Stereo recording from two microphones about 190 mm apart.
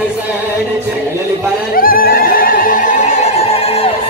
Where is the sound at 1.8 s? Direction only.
50° left (ahead or behind); by 3.9 s 30° left (ahead or behind).